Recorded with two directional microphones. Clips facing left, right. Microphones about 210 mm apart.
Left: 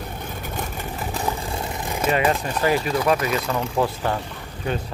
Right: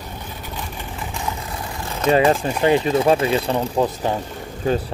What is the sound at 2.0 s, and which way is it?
Speech, 30° right (ahead or behind).